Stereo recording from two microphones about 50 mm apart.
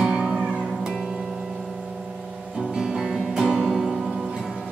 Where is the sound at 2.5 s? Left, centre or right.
Centre.